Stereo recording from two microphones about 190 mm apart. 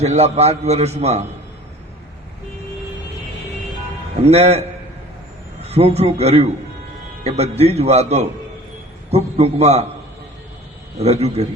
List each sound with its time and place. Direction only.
0.0 s a man's voice: 35° right (ahead or behind)
4.3 s a man's voice: 35° right (ahead or behind)
5.6 s a man's voice: 35° right (ahead or behind)
11.0 s a man's voice: 35° right (ahead or behind)